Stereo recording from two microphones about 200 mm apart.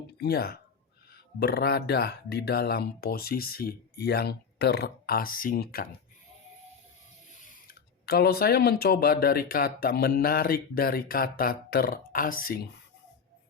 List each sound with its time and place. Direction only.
0.2 s speech: 50° left (ahead or behind)
7.3 s speech: 50° left (ahead or behind)